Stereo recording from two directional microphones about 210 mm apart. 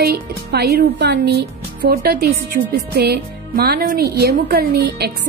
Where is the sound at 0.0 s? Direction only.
50° right (ahead or behind).